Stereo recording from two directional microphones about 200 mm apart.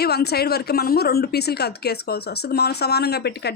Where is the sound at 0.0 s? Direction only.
55° left (ahead or behind).